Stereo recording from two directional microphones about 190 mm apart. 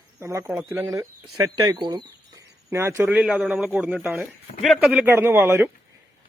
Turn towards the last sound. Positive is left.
turn(degrees=-10)  # may be behind; listen again after turning